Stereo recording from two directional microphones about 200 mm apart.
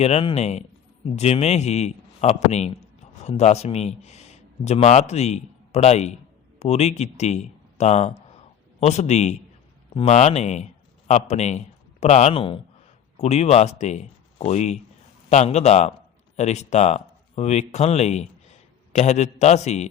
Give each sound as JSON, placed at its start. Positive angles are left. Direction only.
{"t": 0.0, "sound": "a man's voice", "side_deg": 30}